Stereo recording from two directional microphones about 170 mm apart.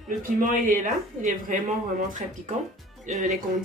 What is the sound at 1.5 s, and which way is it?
Speech, 45° right (ahead or behind).